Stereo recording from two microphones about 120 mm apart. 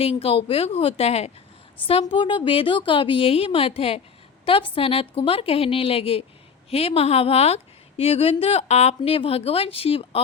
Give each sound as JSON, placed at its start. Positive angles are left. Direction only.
{"t": 0.0, "sound": "a woman's voice", "side_deg": 55}
{"t": 1.9, "sound": "a woman's voice", "side_deg": 50}